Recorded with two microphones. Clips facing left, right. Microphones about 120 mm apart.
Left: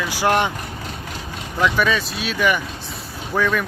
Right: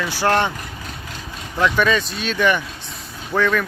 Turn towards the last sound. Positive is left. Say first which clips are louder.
# right 1 dB
turn(degrees=10)  # may be behind; listen again after turning